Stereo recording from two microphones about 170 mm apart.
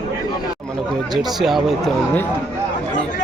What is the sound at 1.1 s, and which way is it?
Speech, centre (ahead or behind).